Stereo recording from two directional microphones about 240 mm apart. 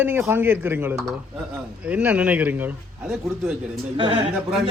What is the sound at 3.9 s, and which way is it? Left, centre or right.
Speech, right.